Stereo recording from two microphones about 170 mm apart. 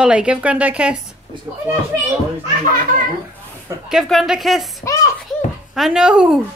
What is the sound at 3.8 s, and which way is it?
Speech, centre (ahead or behind).